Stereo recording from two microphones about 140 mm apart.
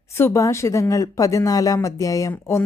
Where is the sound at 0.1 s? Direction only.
20° left (ahead or behind).